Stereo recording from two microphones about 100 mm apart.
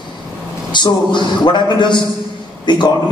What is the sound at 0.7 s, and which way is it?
A man's voice, 50° left (ahead or behind).